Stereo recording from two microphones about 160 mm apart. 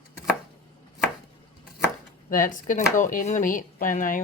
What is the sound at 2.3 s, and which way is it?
Speech, 55° left (ahead or behind).